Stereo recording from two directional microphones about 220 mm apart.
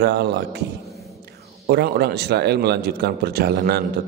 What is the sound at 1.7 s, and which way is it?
Speech, 45° right (ahead or behind).